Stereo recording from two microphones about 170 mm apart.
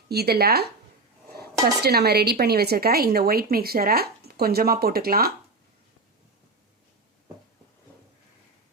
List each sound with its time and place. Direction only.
0.1 s a woman's voice: 70° right (ahead or behind)